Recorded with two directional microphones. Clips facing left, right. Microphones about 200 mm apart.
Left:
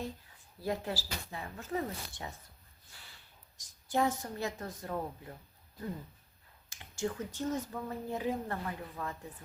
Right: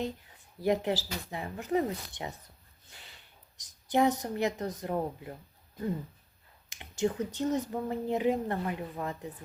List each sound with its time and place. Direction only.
0.6 s speech: 20° right (ahead or behind)
2.9 s snort: 20° right (ahead or behind)
3.6 s speech: 20° right (ahead or behind)
6.7 s speech: 20° right (ahead or behind)